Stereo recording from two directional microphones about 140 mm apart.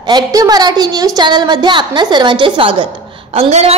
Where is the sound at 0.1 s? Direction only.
25° right (ahead or behind).